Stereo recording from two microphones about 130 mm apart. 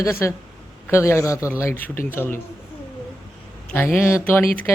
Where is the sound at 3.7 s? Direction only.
15° left (ahead or behind).